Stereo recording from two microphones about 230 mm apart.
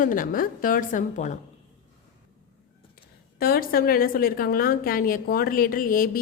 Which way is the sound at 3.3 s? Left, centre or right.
Left.